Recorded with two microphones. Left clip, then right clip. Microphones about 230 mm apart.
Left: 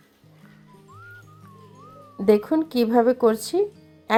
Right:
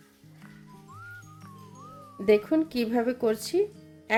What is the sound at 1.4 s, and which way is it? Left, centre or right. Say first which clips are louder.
Music: even; centre.